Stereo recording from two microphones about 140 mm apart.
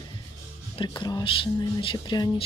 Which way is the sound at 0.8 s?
30° left (ahead or behind).